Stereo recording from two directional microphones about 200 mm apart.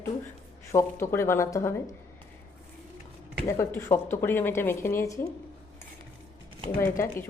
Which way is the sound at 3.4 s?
15° left (ahead or behind).